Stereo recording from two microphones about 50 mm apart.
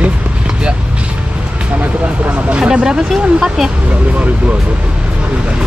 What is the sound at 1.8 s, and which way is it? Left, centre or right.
Vehicle, right.